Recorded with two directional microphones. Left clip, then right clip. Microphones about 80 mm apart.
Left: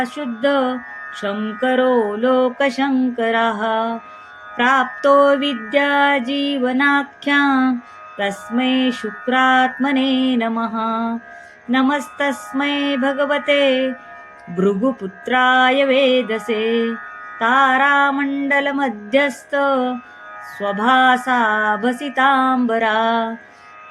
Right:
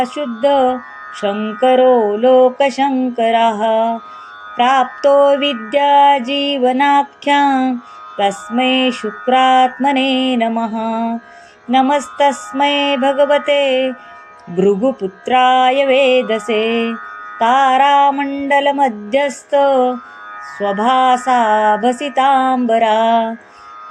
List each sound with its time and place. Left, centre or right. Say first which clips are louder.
0.0 s music: right 4 dB; centre
15.2 s music: right 3 dB; right